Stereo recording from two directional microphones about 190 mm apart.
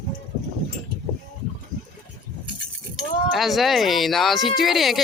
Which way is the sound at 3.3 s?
Centre (ahead or behind).